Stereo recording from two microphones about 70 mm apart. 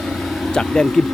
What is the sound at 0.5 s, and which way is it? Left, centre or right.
Speech, centre.